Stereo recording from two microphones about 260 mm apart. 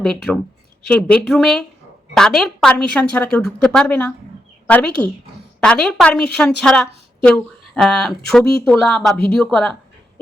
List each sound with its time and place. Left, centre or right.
0.0 s speech: centre